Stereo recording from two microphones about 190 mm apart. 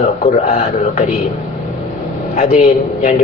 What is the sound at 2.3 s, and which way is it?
Speech, 35° left (ahead or behind).